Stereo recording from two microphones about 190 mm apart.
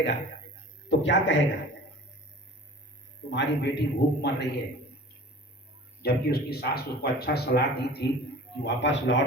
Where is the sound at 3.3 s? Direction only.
65° left (ahead or behind).